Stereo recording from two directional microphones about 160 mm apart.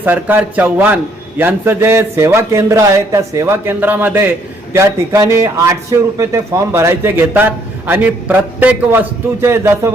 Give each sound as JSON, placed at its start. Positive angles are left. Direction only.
{"t": 0.0, "sound": "a man's voice", "side_deg": -10}